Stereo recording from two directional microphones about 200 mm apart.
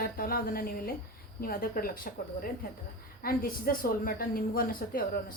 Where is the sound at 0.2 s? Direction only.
50° left (ahead or behind).